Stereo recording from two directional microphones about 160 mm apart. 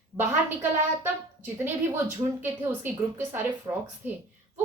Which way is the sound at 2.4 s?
15° right (ahead or behind).